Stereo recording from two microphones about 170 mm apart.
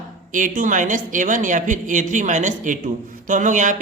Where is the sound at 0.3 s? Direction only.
50° right (ahead or behind).